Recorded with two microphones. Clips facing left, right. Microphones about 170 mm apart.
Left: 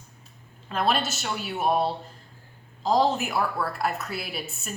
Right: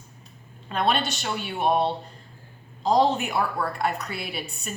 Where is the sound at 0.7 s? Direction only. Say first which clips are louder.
Right 1 dB; centre (ahead or behind).